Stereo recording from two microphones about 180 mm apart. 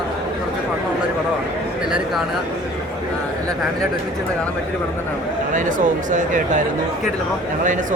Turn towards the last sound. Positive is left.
turn(degrees=-45)  # may be behind; listen again after turning